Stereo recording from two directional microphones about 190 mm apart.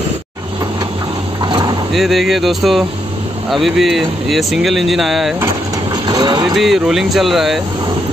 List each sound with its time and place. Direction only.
1.4 s vehicle: 25° right (ahead or behind)
2.0 s speech: centre (ahead or behind)
6.0 s speech: 20° right (ahead or behind)
6.5 s speech: centre (ahead or behind)